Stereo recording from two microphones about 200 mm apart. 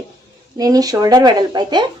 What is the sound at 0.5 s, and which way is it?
Speech, 20° right (ahead or behind).